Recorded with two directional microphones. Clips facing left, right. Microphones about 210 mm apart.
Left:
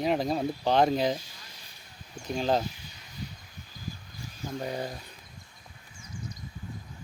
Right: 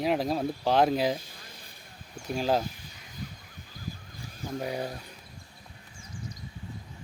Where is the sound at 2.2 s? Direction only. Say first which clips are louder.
Even; 5° right (ahead or behind).